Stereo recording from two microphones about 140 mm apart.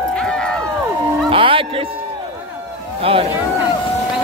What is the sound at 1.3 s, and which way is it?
Speech, 40° right (ahead or behind).